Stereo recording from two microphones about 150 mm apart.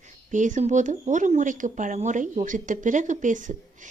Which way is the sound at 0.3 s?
55° right (ahead or behind).